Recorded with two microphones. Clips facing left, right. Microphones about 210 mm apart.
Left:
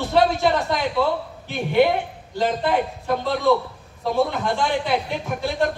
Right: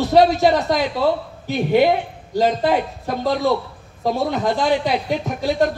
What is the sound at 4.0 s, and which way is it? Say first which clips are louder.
Speech: right 1 dB; 40° right (ahead or behind).